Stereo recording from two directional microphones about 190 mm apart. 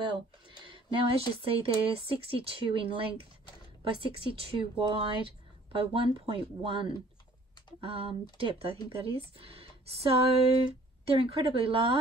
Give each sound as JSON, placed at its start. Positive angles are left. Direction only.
{"t": 0.0, "sound": "a sound", "side_deg": -25}
{"t": 1.3, "sound": "speech", "side_deg": -30}
{"t": 11.1, "sound": "speech", "side_deg": -30}